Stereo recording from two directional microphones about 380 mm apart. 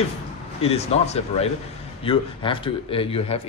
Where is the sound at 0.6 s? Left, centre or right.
Centre.